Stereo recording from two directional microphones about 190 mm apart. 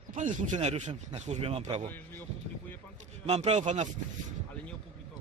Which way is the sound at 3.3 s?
35° right (ahead or behind).